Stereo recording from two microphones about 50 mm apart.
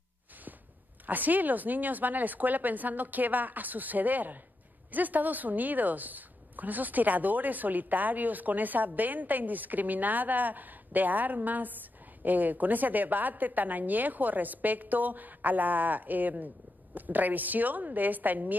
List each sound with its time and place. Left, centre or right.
1.0 s a woman's voice: right